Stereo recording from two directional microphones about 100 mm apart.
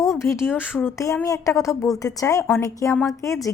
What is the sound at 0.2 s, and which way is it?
Speech, 25° left (ahead or behind).